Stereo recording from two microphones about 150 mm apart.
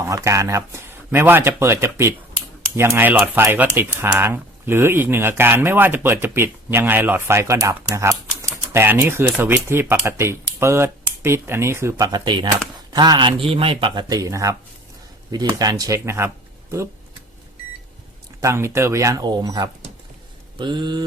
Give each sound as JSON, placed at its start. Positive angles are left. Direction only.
{"t": 0.0, "sound": "speech", "side_deg": -20}
{"t": 18.3, "sound": "speech", "side_deg": -20}
{"t": 20.6, "sound": "a sound", "side_deg": -30}